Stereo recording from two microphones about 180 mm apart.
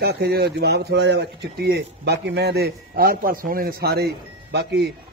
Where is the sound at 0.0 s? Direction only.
65° right (ahead or behind).